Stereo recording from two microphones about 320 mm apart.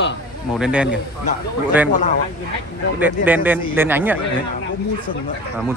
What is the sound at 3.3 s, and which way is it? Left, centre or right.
Speech, centre.